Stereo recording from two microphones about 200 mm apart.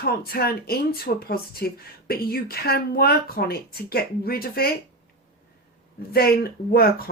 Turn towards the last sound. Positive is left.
turn(degrees=50)  # may be behind; listen again after turning